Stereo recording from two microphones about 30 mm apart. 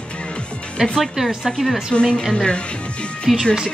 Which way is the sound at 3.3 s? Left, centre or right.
Centre.